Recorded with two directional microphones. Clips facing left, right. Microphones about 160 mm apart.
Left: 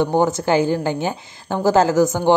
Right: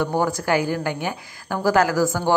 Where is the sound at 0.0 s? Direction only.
25° left (ahead or behind).